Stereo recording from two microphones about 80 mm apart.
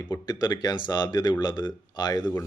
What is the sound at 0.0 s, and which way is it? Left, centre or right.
Speech, left.